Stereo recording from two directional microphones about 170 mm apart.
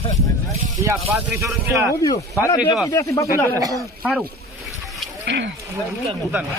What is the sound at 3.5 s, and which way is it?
Speech, 20° right (ahead or behind).